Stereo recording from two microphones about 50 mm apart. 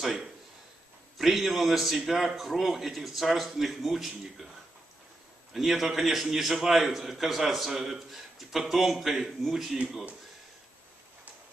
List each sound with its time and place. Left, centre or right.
1.1 s a man's voice: centre
5.5 s a man's voice: centre